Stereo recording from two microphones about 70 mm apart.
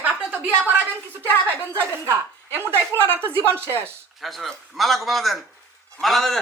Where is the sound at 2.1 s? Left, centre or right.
Right.